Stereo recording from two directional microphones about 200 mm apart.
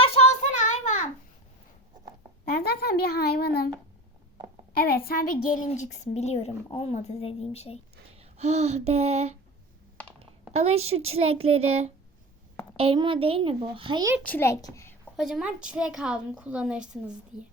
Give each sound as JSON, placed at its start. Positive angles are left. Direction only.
{"t": 0.0, "sound": "child singing", "side_deg": 30}
{"t": 2.4, "sound": "a woman's voice", "side_deg": 50}
{"t": 4.9, "sound": "speech", "side_deg": 50}
{"t": 8.1, "sound": "speech", "side_deg": -30}
{"t": 10.5, "sound": "a woman's voice", "side_deg": -30}
{"t": 14.3, "sound": "a child's voice", "side_deg": 10}
{"t": 15.1, "sound": "a woman's voice", "side_deg": -5}